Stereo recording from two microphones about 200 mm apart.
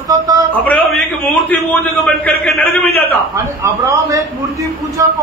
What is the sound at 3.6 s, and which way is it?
Speech, 15° right (ahead or behind).